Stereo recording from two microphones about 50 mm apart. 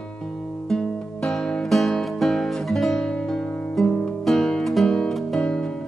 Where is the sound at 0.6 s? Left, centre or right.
Centre.